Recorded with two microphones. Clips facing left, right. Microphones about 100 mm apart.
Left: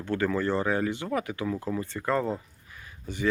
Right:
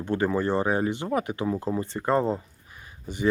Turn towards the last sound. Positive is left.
turn(degrees=-15)  # may be behind; listen again after turning